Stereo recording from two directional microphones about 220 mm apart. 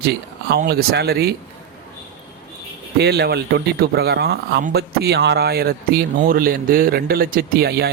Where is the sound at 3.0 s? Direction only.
45° right (ahead or behind).